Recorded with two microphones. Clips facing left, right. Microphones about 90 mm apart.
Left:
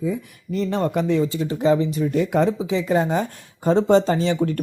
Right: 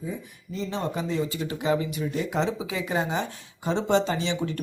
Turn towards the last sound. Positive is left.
turn(degrees=45)  # may be behind; listen again after turning